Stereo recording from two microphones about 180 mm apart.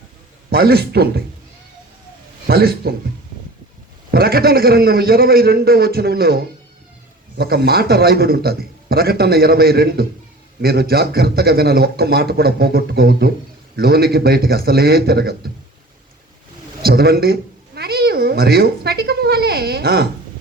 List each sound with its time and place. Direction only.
0.5 s a man's voice: 60° right (ahead or behind)
2.5 s a man's voice: 60° right (ahead or behind)
4.1 s a man's voice: 60° right (ahead or behind)
16.8 s a man's voice: 60° right (ahead or behind)